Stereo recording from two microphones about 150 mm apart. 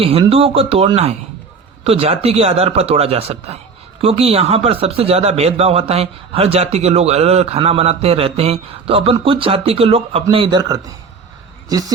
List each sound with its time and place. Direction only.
0.0 s a man's voice: 40° right (ahead or behind); by 11.9 s 25° right (ahead or behind)